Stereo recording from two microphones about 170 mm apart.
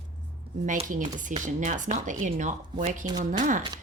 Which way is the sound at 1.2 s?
50° right (ahead or behind).